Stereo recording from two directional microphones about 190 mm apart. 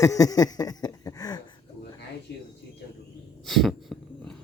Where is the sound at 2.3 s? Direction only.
60° left (ahead or behind).